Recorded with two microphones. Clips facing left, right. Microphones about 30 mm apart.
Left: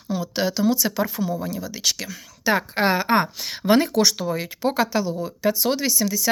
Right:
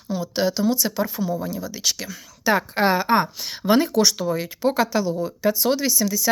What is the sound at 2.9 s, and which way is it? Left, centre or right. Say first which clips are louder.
Speech: right 1 dB; left.